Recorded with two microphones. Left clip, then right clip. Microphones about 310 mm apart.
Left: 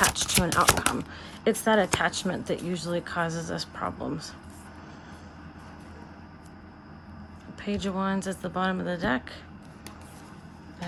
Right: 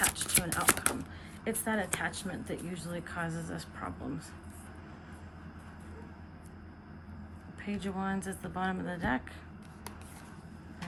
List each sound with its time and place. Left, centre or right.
0.0 s a sound: centre
1.5 s speech: centre
7.6 s speech: centre